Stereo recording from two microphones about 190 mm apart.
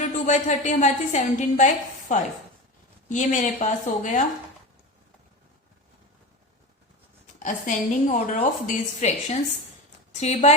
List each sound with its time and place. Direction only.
0.0 s a woman's voice: 40° left (ahead or behind)
7.3 s a woman's voice: 40° left (ahead or behind)